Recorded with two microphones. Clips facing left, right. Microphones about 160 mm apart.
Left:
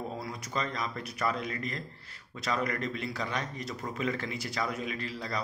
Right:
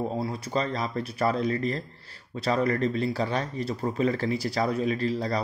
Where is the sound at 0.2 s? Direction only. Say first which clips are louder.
Right 7 dB; 30° right (ahead or behind).